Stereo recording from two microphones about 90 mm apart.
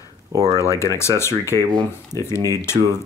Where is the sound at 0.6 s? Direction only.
35° left (ahead or behind).